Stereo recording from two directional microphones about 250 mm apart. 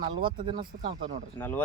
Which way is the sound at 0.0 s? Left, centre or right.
Centre.